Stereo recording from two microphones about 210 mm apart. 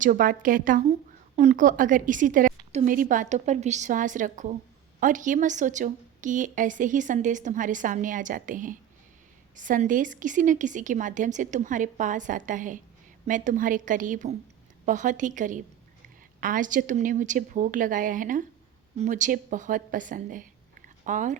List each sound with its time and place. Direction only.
0.0 s a woman's voice: 40° right (ahead or behind)